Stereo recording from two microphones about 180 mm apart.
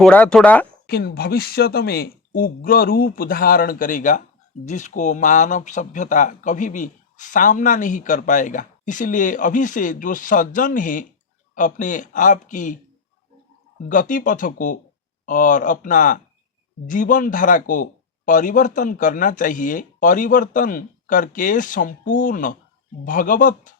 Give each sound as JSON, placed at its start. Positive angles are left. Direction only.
{"t": 0.0, "sound": "speech", "side_deg": 5}
{"t": 0.9, "sound": "speech", "side_deg": 60}
{"t": 13.8, "sound": "speech", "side_deg": 50}